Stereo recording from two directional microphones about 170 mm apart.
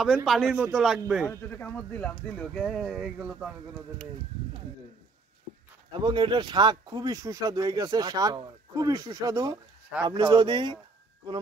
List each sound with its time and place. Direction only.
0.0 s speech: centre (ahead or behind)
1.3 s speech: 15° left (ahead or behind); by 3.5 s 5° right (ahead or behind)
5.9 s speech: 25° right (ahead or behind)